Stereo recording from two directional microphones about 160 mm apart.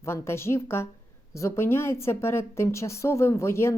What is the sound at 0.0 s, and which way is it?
A woman's voice, 15° left (ahead or behind).